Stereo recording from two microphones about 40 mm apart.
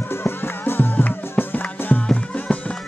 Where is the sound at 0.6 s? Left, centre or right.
Left.